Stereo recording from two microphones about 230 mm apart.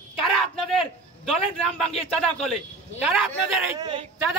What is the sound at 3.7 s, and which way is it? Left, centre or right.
Speech, right.